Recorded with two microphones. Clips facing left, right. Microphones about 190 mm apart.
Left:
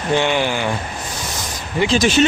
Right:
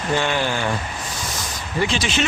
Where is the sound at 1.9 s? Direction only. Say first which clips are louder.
Left 8 dB; 40° left (ahead or behind).